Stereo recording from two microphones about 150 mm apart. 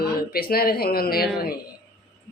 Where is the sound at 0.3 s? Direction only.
85° left.